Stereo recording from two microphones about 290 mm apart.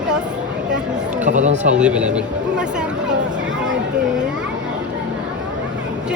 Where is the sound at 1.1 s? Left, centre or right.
Right.